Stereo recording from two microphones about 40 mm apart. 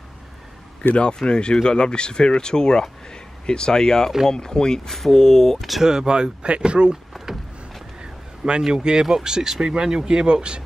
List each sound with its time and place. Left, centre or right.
0.9 s speech: left
4.8 s speech: centre
5.9 s speech: centre
8.0 s a sound: right
9.0 s speech: centre